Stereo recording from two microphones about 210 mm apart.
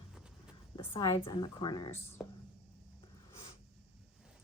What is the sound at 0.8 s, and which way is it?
Speech, 15° left (ahead or behind).